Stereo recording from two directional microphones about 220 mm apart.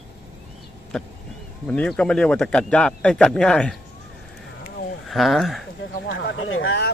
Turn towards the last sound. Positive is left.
turn(degrees=65)  # may be behind; listen again after turning